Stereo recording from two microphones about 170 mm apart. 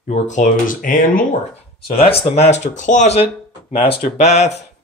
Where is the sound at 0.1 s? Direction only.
45° left (ahead or behind).